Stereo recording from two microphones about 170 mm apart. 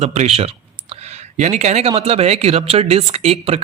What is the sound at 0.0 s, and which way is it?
Speech, 40° right (ahead or behind).